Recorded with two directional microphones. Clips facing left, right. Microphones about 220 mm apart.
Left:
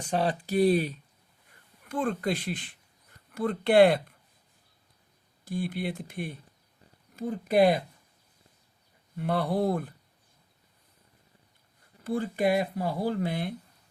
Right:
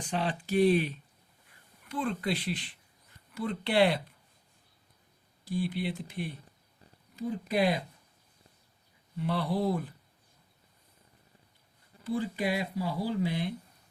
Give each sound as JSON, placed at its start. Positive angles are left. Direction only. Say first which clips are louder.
{"t": 0.1, "sound": "speech", "louder": "left 3 dB", "side_deg": 40}
{"t": 5.5, "sound": "speech", "louder": "left 1 dB", "side_deg": 50}
{"t": 9.1, "sound": "speech", "louder": "left 3 dB", "side_deg": 50}
{"t": 12.0, "sound": "speech", "louder": "left 4 dB", "side_deg": 50}